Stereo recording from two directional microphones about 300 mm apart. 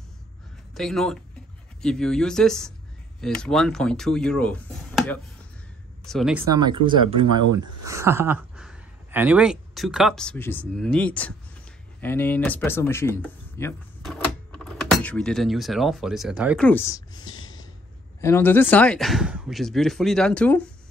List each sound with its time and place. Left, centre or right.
0.7 s speech: centre
7.4 s speech: right
7.8 s speech: centre
17.3 s snort: left
18.2 s speech: centre